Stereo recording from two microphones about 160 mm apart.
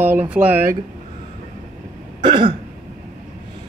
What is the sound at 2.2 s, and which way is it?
Throat clearing, 30° right (ahead or behind).